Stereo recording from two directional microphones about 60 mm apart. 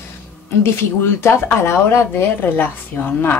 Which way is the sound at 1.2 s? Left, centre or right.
Left.